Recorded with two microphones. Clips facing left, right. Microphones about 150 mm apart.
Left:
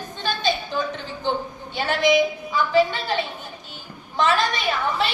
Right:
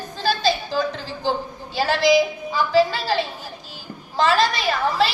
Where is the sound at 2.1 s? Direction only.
35° right (ahead or behind).